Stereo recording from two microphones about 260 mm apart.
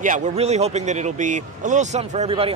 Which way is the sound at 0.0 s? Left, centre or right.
Right.